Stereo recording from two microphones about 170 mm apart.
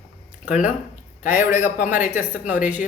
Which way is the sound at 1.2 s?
15° right (ahead or behind).